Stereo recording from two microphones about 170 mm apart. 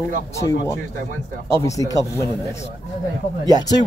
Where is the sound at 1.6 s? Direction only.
20° left (ahead or behind).